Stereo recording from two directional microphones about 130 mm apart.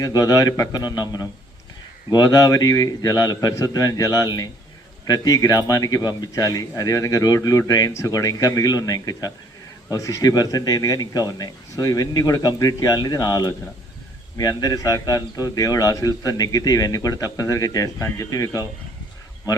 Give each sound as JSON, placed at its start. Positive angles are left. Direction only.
{"t": 0.0, "sound": "a man's voice", "side_deg": 30}